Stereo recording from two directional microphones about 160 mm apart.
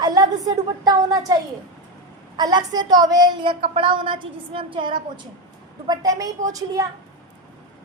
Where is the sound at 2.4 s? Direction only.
25° right (ahead or behind).